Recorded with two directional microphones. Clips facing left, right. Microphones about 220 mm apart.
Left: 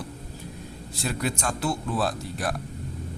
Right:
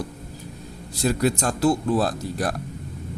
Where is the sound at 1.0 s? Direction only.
40° right (ahead or behind).